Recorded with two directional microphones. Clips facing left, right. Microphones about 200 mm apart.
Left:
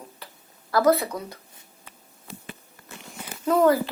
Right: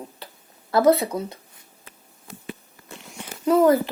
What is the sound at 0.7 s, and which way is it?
Speech, 25° right (ahead or behind).